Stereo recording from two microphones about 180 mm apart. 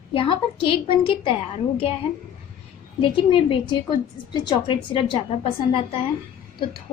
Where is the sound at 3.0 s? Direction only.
25° left (ahead or behind).